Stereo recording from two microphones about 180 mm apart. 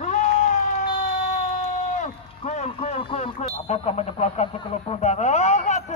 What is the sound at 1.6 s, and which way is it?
Speech, 40° left (ahead or behind).